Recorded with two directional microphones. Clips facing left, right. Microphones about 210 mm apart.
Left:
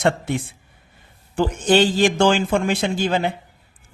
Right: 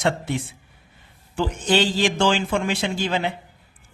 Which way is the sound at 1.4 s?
50° left (ahead or behind).